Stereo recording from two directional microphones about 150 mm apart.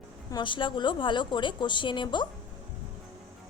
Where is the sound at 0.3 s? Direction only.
30° left (ahead or behind).